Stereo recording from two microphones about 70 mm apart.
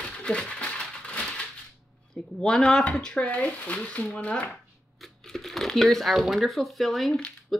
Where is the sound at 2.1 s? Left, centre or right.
Centre.